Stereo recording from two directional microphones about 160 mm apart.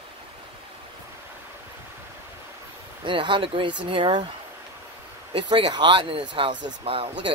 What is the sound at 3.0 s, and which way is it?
Speech, 30° right (ahead or behind).